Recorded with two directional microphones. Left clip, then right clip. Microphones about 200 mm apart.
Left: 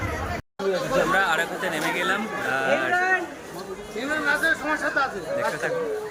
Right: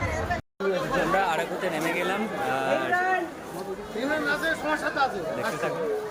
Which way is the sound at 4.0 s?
10° left (ahead or behind).